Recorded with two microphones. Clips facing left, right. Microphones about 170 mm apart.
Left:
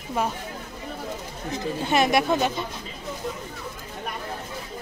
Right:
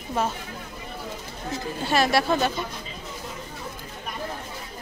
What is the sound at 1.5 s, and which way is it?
Speech, 20° left (ahead or behind).